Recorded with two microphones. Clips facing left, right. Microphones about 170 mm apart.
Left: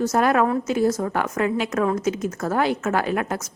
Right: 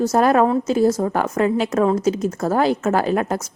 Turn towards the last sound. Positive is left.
turn(degrees=-35)  # may be behind; listen again after turning